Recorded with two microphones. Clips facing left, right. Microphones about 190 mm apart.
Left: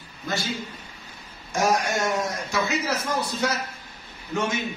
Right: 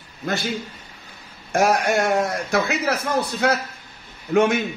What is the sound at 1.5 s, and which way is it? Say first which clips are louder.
A man's voice: right 4 dB; 60° right (ahead or behind).